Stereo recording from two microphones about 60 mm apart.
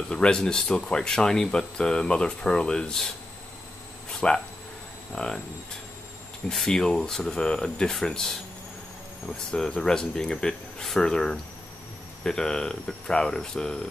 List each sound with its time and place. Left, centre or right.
0.1 s speech: centre
4.2 s speech: centre
6.5 s speech: centre